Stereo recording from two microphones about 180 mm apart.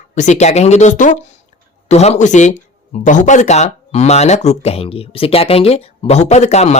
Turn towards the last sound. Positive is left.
turn(degrees=35)  # may be behind; listen again after turning